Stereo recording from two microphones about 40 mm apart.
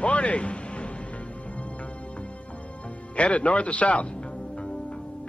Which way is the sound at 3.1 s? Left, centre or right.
Left.